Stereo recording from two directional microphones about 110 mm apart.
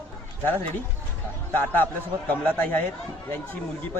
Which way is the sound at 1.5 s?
15° left (ahead or behind).